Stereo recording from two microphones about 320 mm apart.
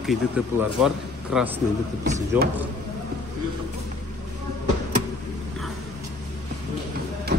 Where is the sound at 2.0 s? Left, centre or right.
Right.